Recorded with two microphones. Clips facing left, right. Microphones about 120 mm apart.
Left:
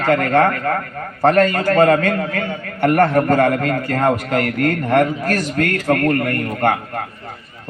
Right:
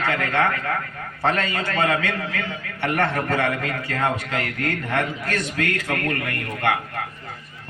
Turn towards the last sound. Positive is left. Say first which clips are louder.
# left 6 dB
turn(degrees=40)  # may be behind; listen again after turning